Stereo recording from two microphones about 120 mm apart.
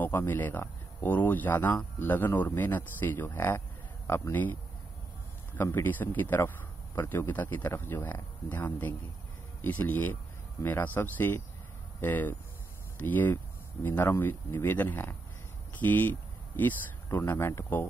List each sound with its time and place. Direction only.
0.0 s speech: 15° left (ahead or behind)
5.6 s speech: 15° left (ahead or behind)